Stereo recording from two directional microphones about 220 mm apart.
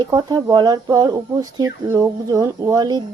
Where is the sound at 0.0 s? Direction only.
15° right (ahead or behind).